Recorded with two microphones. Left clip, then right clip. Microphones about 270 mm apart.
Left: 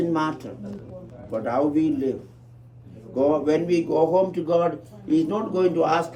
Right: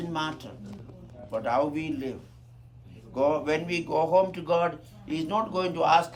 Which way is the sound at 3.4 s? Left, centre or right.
Right.